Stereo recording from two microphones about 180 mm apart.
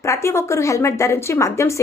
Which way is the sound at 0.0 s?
15° left (ahead or behind).